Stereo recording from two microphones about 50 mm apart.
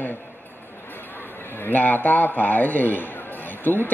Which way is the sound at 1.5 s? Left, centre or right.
Left.